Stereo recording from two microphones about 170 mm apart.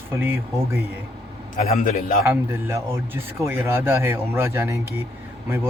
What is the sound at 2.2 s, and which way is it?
Speech, 15° right (ahead or behind).